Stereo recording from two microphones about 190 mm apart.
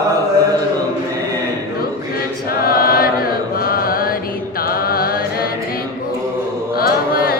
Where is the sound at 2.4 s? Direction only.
50° left (ahead or behind).